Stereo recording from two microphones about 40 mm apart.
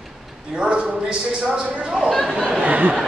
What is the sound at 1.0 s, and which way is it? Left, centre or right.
Speech, right.